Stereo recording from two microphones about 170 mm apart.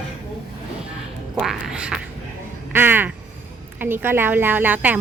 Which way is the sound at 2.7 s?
10° right (ahead or behind).